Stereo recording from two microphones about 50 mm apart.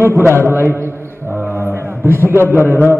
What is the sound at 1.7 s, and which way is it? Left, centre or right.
A man's voice, right.